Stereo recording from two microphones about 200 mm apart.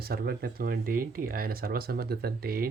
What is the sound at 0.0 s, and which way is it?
Speech, 50° right (ahead or behind).